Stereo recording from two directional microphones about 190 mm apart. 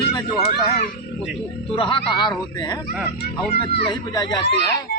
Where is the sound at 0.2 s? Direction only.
20° left (ahead or behind).